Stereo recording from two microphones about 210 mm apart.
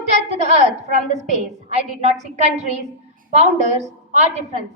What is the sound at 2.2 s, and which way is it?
Speech, 35° right (ahead or behind).